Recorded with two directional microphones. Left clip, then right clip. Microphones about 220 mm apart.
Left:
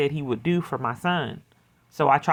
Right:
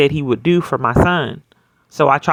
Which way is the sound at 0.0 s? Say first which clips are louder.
Right 10 dB; 30° right (ahead or behind).